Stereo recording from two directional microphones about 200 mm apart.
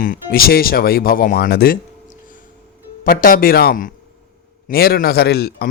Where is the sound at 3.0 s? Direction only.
45° left (ahead or behind).